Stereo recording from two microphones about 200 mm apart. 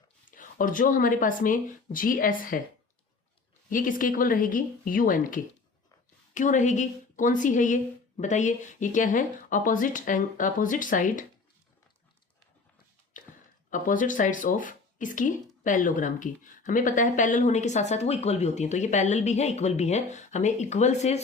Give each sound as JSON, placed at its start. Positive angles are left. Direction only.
{"t": 0.3, "sound": "speech", "side_deg": 40}
{"t": 3.7, "sound": "speech", "side_deg": 45}
{"t": 13.2, "sound": "a sound", "side_deg": 40}
{"t": 13.7, "sound": "speech", "side_deg": 40}